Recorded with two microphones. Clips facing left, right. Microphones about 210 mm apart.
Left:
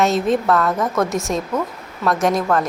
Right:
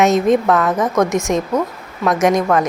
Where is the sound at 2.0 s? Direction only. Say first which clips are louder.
Right 3 dB; centre (ahead or behind).